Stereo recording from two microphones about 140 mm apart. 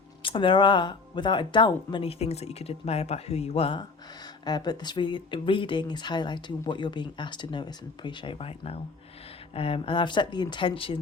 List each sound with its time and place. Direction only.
0.2 s speech: 35° left (ahead or behind)
4.4 s speech: 30° left (ahead or behind)